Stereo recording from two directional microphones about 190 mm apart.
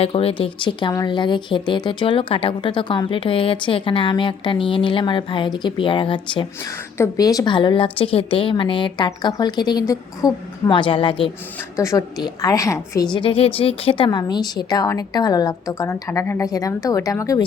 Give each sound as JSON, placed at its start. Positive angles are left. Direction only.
{"t": 0.0, "sound": "speech", "side_deg": 30}